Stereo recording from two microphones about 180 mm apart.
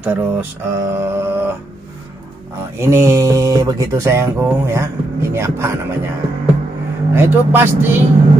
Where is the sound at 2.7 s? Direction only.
15° right (ahead or behind).